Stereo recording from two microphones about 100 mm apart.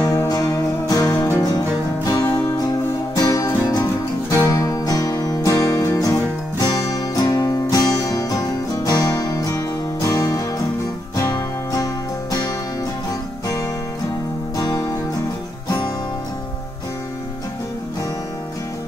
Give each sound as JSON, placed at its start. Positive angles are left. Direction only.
{"t": 0.0, "sound": "music", "side_deg": 35}
{"t": 1.0, "sound": "music", "side_deg": 25}
{"t": 2.0, "sound": "music", "side_deg": 40}
{"t": 14.6, "sound": "music", "side_deg": 35}